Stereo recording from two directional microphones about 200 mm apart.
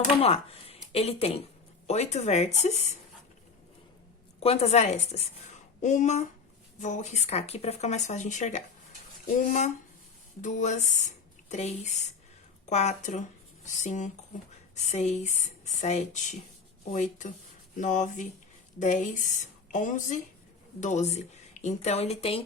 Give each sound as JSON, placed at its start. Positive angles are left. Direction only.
{"t": 0.2, "sound": "speech", "side_deg": 30}
{"t": 4.4, "sound": "a woman's voice", "side_deg": 30}